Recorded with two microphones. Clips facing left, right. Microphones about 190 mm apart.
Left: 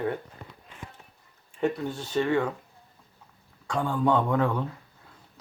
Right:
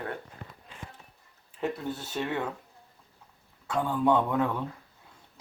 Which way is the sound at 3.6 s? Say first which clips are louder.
Even; 5° right (ahead or behind).